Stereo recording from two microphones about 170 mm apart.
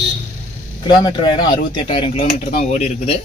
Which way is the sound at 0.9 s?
25° left (ahead or behind).